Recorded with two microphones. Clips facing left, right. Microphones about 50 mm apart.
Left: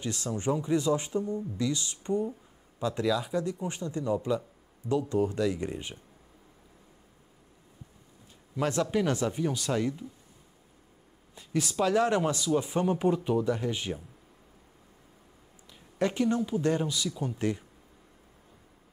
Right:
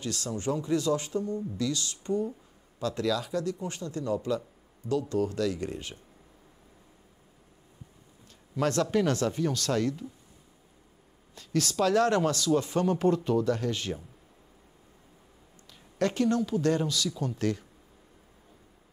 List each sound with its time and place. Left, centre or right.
0.0 s speech: left
8.5 s speech: centre
11.3 s speech: centre
16.0 s speech: centre